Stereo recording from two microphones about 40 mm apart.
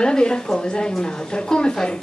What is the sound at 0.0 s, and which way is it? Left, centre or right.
Speech, left.